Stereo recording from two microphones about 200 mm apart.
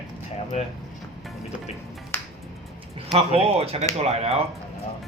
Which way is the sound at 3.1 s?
30° right (ahead or behind).